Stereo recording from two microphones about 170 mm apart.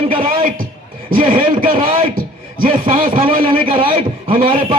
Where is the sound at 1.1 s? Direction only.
55° right (ahead or behind).